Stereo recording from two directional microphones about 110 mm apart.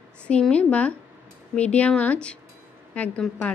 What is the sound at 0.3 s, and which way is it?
A woman's voice, 10° left (ahead or behind).